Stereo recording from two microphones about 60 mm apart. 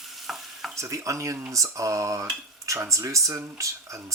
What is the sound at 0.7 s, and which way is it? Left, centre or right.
Speech, right.